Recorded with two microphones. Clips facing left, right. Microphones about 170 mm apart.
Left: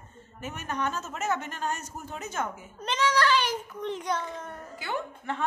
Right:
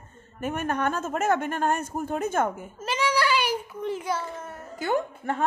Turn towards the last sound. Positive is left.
turn(degrees=-45)  # may be behind; listen again after turning